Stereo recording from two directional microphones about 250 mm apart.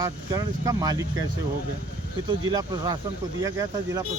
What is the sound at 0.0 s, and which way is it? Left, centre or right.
Speech, centre.